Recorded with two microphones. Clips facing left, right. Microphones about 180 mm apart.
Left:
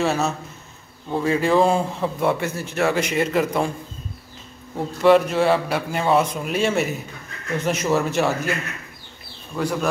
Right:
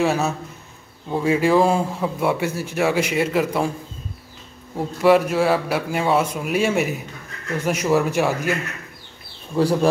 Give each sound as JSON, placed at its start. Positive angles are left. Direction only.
{"t": 0.0, "sound": "a man's voice", "side_deg": -10}
{"t": 4.7, "sound": "a man's voice", "side_deg": -5}
{"t": 9.6, "sound": "speech", "side_deg": -30}